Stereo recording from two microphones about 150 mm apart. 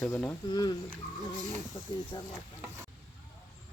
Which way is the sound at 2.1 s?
30° left (ahead or behind).